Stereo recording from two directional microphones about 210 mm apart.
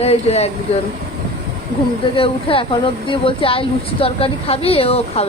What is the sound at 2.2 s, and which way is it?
Speech, 25° left (ahead or behind).